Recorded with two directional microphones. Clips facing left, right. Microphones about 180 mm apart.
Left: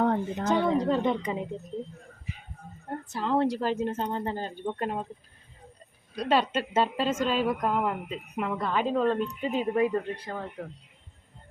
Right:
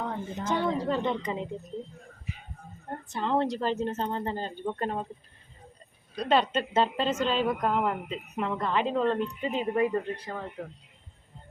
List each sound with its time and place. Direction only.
0.0 s a sound: 55° left (ahead or behind)
0.9 s speech: 10° left (ahead or behind)
2.9 s speech: centre (ahead or behind)
6.1 s a woman's voice: 10° left (ahead or behind)
9.9 s a woman's voice: 5° right (ahead or behind)